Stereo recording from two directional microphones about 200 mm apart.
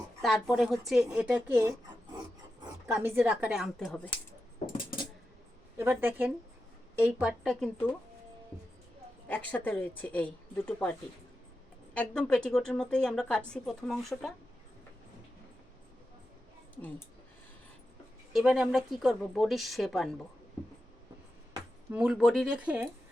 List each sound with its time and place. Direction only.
0.2 s speech: centre (ahead or behind)
2.8 s speech: 10° right (ahead or behind)
4.6 s cutlery: 40° left (ahead or behind)
5.7 s speech: 10° right (ahead or behind); by 7.9 s 5° left (ahead or behind)
9.5 s speech: 10° left (ahead or behind)
11.9 s speech: 5° left (ahead or behind)
18.3 s speech: centre (ahead or behind)
21.5 s speech: 5° right (ahead or behind)